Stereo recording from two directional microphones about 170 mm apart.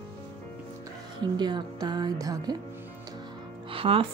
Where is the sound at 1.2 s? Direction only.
25° right (ahead or behind).